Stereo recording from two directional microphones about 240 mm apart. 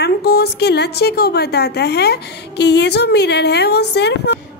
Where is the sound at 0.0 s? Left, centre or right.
Left.